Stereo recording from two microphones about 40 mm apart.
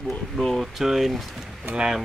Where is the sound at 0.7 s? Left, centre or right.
Centre.